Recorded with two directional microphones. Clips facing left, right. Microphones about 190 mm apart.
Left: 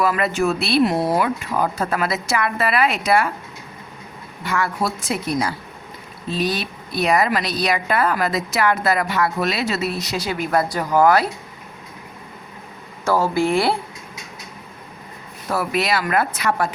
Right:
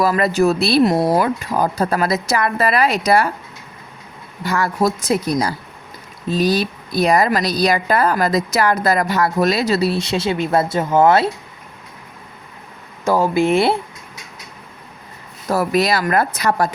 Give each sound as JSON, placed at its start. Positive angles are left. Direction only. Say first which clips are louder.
{"t": 0.0, "sound": "speech", "louder": "right 4 dB", "side_deg": -35}
{"t": 4.4, "sound": "speech", "louder": "right 4 dB", "side_deg": -40}
{"t": 13.1, "sound": "speech", "louder": "right 3 dB", "side_deg": -15}
{"t": 15.4, "sound": "speech", "louder": "right 4 dB", "side_deg": -40}